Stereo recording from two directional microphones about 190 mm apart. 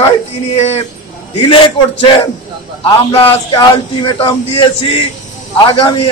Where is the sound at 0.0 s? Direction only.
35° left (ahead or behind).